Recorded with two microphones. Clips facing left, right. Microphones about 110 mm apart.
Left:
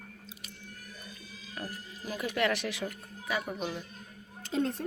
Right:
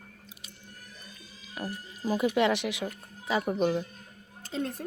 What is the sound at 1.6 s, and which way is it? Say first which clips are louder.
Speech: right 7 dB; 30° right (ahead or behind).